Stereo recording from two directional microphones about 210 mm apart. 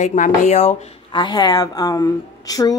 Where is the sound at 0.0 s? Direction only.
35° left (ahead or behind).